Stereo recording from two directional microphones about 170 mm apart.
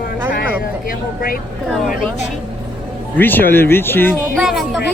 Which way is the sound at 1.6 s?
5° left (ahead or behind).